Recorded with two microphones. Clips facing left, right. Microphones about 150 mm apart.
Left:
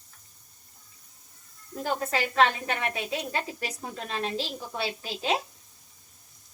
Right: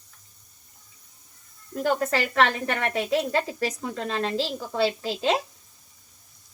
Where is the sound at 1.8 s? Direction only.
75° right (ahead or behind).